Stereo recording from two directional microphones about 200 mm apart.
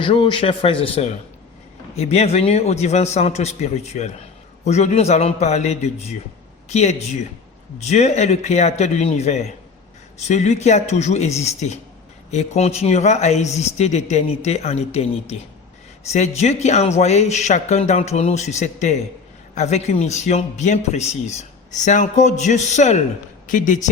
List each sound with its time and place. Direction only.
0.0 s a man's voice: 25° left (ahead or behind)